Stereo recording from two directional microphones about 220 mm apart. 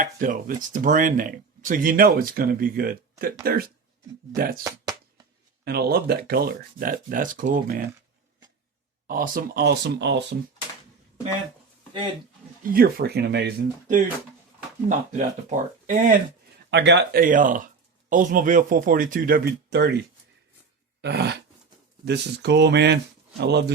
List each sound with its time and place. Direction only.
0.0 s speech: 40° right (ahead or behind)
4.6 s a sound: 15° right (ahead or behind)
5.6 s speech: 45° right (ahead or behind)
9.0 s speech: 40° right (ahead or behind)
12.7 s speech: 45° right (ahead or behind)
14.8 s speech: 35° right (ahead or behind)
16.6 s speech: 50° right (ahead or behind)